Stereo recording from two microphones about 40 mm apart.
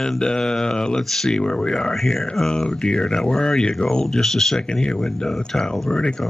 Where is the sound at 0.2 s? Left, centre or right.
Centre.